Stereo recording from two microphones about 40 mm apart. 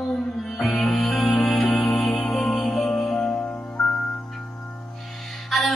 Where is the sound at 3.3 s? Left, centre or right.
Left.